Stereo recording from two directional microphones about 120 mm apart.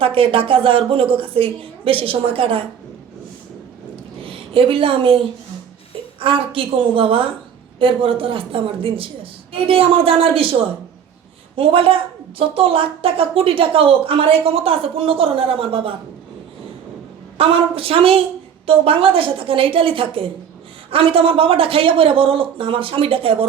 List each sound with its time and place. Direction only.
0.0 s a woman's voice: 50° right (ahead or behind)
4.3 s a woman's voice: 50° right (ahead or behind)
11.5 s a woman's voice: 50° right (ahead or behind)
17.3 s a woman's voice: 50° right (ahead or behind)